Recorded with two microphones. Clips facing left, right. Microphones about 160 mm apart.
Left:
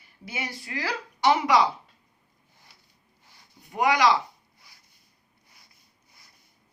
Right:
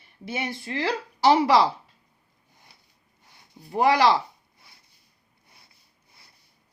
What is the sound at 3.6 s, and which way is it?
Speech, 30° right (ahead or behind).